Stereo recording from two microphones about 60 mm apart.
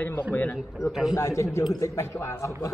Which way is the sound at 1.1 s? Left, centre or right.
Left.